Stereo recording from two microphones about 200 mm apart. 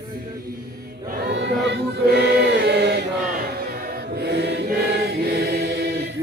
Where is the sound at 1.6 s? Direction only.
55° right (ahead or behind).